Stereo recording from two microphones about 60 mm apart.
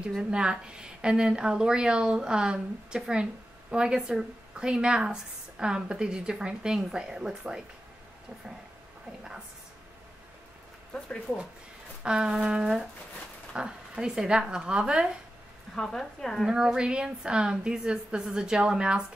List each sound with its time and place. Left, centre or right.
0.2 s speech: centre
10.9 s speech: centre
12.0 s a sound: centre
12.4 s speech: centre
15.7 s speech: centre
16.4 s speech: centre